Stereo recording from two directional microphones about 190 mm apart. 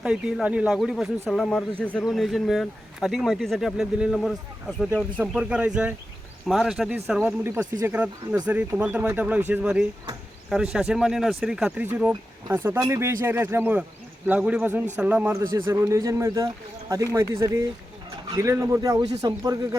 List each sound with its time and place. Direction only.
0.0 s speech: 5° right (ahead or behind)